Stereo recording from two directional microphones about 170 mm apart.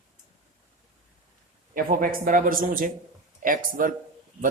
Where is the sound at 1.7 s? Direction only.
55° right (ahead or behind).